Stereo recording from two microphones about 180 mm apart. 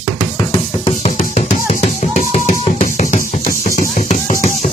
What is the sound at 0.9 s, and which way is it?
Music, 40° left (ahead or behind).